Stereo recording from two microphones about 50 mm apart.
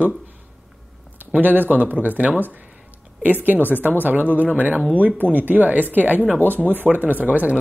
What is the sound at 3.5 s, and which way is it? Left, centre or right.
Speech, left.